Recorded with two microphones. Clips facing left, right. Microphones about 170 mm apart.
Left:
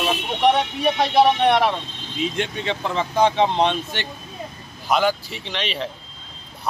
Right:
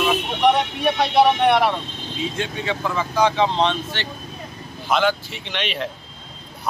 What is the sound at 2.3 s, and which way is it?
Speech, 25° left (ahead or behind).